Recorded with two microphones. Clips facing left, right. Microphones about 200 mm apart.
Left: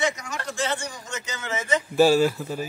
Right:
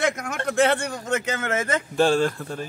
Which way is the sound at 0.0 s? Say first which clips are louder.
Right 2 dB; 55° right (ahead or behind).